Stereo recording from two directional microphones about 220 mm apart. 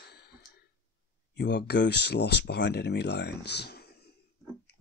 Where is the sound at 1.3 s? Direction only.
50° left (ahead or behind).